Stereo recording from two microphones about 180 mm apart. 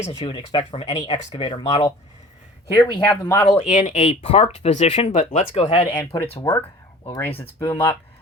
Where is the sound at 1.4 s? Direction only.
25° left (ahead or behind).